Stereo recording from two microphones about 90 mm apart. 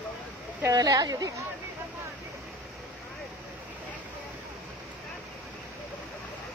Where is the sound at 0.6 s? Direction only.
40° right (ahead or behind).